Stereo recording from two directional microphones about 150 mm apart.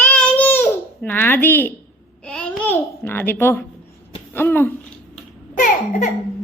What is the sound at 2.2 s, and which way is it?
A child's voice, 5° left (ahead or behind).